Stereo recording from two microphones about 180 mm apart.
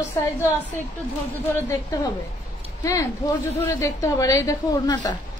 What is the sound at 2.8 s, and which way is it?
A woman's voice, 20° left (ahead or behind).